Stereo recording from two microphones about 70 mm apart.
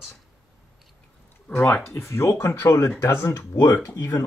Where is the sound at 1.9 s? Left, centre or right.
Left.